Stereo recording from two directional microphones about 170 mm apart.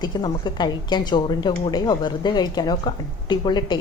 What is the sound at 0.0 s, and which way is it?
A woman's voice, 25° left (ahead or behind).